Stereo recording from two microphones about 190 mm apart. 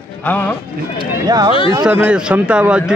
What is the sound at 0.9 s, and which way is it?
Speech, 20° right (ahead or behind).